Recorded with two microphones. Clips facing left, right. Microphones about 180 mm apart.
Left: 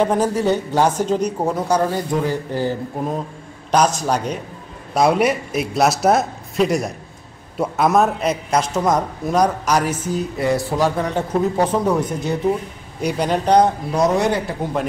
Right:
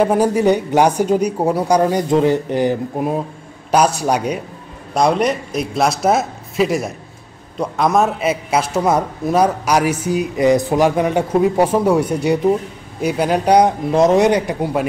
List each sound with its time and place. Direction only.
0.0 s a man's voice: 10° right (ahead or behind)
4.9 s a man's voice: 5° left (ahead or behind)